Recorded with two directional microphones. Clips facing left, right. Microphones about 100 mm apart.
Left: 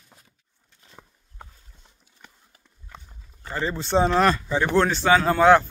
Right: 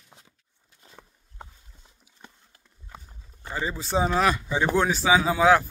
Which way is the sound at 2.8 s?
10° right (ahead or behind).